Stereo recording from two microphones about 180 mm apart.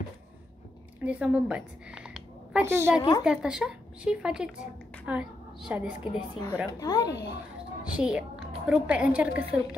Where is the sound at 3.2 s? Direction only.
5° right (ahead or behind).